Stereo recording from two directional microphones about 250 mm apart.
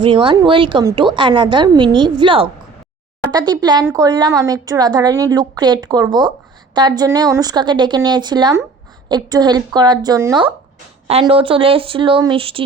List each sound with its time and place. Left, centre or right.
0.0 s a woman's voice: centre